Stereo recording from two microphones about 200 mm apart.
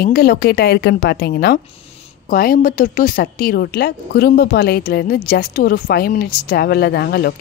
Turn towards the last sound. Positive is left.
turn(degrees=55)  # may be behind; listen again after turning